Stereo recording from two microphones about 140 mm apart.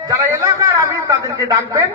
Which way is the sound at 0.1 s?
20° right (ahead or behind).